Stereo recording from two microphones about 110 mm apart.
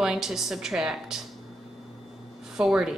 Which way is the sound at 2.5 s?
5° right (ahead or behind).